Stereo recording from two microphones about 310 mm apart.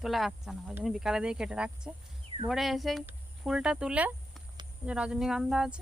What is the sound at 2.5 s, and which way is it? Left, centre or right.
Speech, centre.